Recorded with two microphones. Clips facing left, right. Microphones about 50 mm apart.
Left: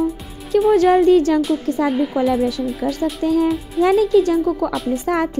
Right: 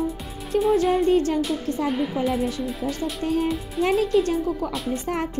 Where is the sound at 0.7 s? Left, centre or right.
Left.